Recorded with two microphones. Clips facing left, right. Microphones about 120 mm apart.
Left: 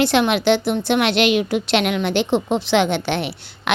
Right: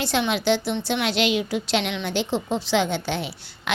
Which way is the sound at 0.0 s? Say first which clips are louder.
Left 6 dB; 65° left (ahead or behind).